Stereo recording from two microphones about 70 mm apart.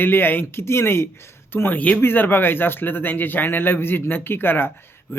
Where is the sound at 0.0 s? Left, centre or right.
Left.